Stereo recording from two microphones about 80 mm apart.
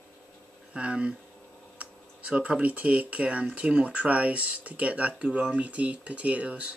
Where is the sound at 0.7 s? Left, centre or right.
Centre.